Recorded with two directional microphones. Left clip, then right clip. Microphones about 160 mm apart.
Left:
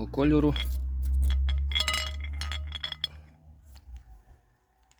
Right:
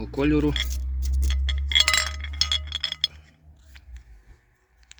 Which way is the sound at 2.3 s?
20° right (ahead or behind).